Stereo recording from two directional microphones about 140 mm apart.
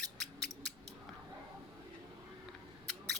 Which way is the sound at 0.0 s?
5° left (ahead or behind).